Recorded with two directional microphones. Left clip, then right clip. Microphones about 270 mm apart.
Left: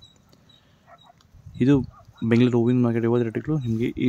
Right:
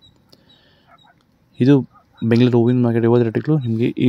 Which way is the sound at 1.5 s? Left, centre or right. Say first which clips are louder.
Right 6 dB; centre.